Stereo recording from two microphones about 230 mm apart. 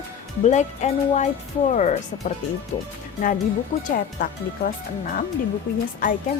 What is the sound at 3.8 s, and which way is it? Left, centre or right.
Speech, left.